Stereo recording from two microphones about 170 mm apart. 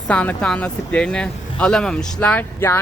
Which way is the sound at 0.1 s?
5° left (ahead or behind).